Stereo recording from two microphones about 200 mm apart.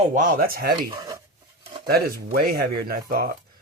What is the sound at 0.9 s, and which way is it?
Speech, 20° right (ahead or behind).